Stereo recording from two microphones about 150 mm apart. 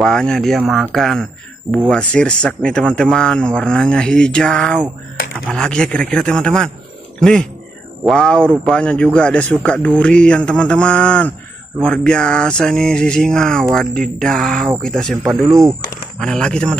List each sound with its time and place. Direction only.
0.0 s a man's voice: 5° left (ahead or behind)
15.4 s speech: 20° right (ahead or behind)
16.2 s speech: 5° left (ahead or behind)